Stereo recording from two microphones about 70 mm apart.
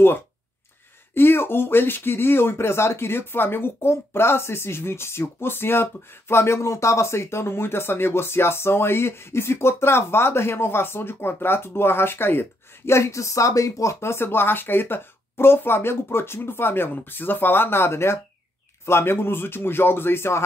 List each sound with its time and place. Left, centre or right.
1.1 s speech: left